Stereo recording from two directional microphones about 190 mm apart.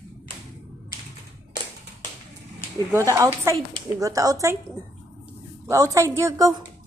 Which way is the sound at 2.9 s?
15° right (ahead or behind).